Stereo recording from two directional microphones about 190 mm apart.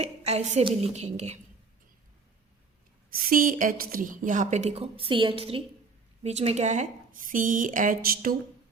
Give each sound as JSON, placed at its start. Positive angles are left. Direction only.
{"t": 0.0, "sound": "a woman's voice", "side_deg": -35}
{"t": 3.2, "sound": "a woman's voice", "side_deg": -50}